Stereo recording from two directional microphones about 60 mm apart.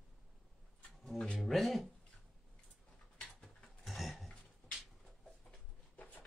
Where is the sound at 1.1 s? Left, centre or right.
Centre.